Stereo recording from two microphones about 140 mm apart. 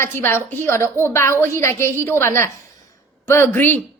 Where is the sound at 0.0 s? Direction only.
15° left (ahead or behind).